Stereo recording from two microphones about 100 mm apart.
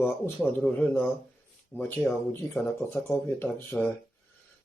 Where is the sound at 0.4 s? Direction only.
15° left (ahead or behind).